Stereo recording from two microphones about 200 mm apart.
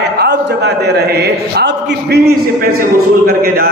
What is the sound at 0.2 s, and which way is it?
A man's voice, 55° right (ahead or behind).